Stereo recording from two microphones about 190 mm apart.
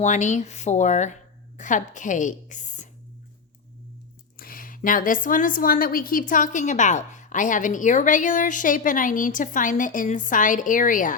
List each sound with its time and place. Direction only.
0.0 s speech: 40° left (ahead or behind)
4.4 s a woman's voice: 50° left (ahead or behind)